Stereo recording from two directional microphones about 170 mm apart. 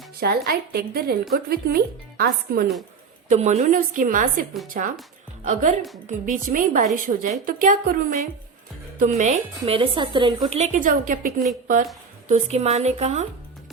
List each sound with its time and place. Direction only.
0.2 s speech: 65° right (ahead or behind)
3.2 s a woman's voice: 45° right (ahead or behind)
9.7 s a woman's voice: 30° right (ahead or behind)
10.6 s a woman's voice: 50° right (ahead or behind)
12.3 s speech: 40° right (ahead or behind)